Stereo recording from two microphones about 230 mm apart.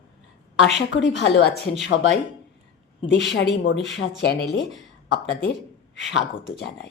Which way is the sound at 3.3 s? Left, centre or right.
Left.